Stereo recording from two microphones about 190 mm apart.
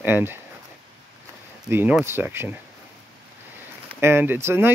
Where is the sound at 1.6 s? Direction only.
10° right (ahead or behind).